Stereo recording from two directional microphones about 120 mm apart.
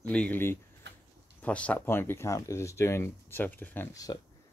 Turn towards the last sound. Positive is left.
turn(degrees=15)  # may be behind; listen again after turning